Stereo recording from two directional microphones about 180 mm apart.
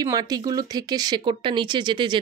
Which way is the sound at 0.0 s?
20° right (ahead or behind).